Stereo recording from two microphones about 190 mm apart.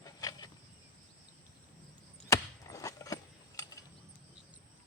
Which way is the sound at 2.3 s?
15° left (ahead or behind).